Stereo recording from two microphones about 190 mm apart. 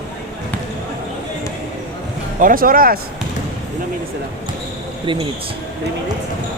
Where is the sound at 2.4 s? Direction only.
50° right (ahead or behind).